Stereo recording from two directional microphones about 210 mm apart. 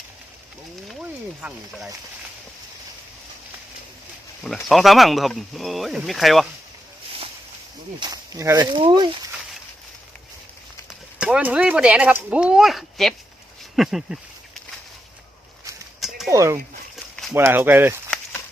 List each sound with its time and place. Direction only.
1.4 s speech: 5° right (ahead or behind)
4.4 s speech: centre (ahead or behind)
7.9 s speech: 20° right (ahead or behind)
10.8 s speech: 5° right (ahead or behind)
16.0 s a sound: centre (ahead or behind)
16.3 s speech: 15° right (ahead or behind)